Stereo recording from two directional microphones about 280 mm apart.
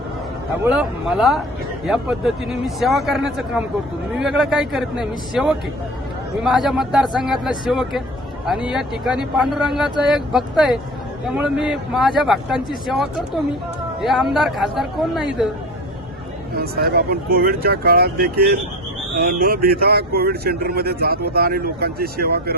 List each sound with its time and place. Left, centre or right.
0.7 s speech: centre
16.6 s speech: right